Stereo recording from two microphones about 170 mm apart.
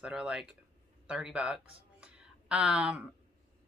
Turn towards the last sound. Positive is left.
turn(degrees=-5)  # may be behind; listen again after turning